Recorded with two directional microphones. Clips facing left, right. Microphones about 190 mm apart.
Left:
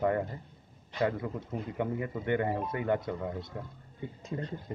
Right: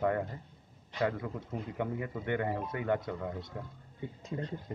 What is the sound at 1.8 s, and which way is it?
Speech, 25° left (ahead or behind).